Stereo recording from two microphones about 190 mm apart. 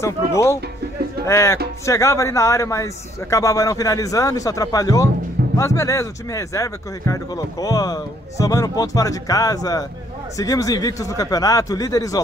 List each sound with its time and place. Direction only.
0.0 s speech: 15° left (ahead or behind)